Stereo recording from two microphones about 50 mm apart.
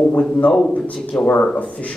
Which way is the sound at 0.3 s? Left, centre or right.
Centre.